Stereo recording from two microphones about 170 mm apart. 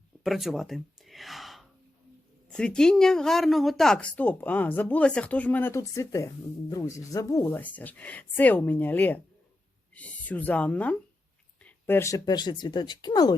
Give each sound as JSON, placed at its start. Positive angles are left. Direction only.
{"t": 0.2, "sound": "gasp", "side_deg": 0}
{"t": 2.5, "sound": "a woman's voice", "side_deg": 5}